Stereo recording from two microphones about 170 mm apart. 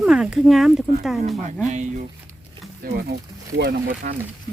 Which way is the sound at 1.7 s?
45° right (ahead or behind).